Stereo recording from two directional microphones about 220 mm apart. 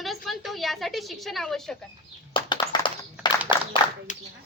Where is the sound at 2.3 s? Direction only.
20° left (ahead or behind).